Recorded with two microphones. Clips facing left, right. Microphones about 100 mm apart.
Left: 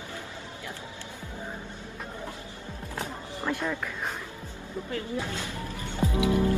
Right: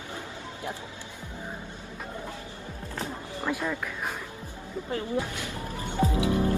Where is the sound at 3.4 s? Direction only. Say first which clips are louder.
Even; 5° right (ahead or behind).